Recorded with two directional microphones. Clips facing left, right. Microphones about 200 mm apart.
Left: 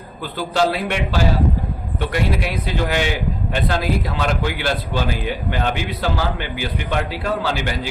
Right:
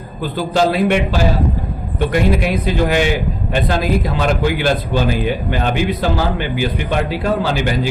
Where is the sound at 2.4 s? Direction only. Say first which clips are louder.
Right 6 dB; 15° right (ahead or behind).